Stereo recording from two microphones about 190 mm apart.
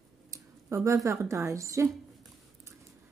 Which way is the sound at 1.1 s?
15° right (ahead or behind).